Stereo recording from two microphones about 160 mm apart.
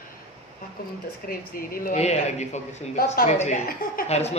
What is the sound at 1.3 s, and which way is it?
Speech, 65° left (ahead or behind).